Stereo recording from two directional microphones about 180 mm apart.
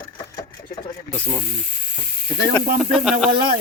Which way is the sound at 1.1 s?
10° left (ahead or behind).